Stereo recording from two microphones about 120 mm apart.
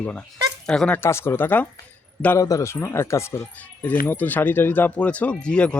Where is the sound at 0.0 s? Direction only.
10° left (ahead or behind).